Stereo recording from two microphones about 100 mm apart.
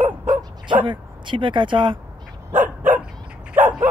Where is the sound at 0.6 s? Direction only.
55° right (ahead or behind).